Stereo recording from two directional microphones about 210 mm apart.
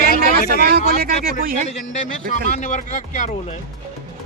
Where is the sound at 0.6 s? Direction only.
50° right (ahead or behind).